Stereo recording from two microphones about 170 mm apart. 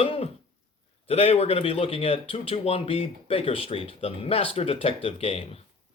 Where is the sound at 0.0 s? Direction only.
35° left (ahead or behind).